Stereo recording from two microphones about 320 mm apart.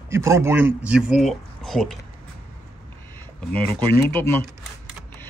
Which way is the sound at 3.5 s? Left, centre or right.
Centre.